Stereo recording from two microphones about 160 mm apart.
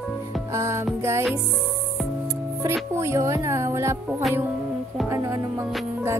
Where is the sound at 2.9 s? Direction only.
15° right (ahead or behind).